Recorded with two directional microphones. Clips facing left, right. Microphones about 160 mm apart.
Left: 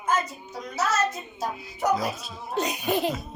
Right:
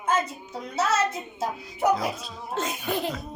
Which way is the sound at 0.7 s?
25° right (ahead or behind).